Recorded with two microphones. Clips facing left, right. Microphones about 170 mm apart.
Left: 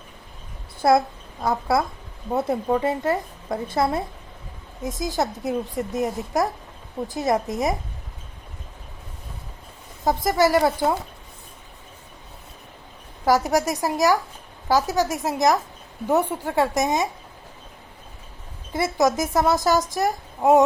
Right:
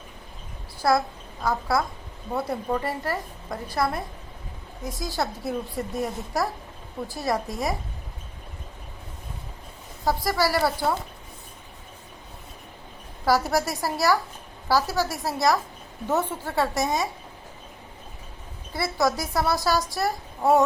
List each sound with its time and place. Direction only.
0.8 s a child's voice: 25° left (ahead or behind)
10.0 s a woman's voice: 20° left (ahead or behind)
13.2 s a woman's voice: 15° left (ahead or behind)
18.7 s a woman's voice: 20° left (ahead or behind)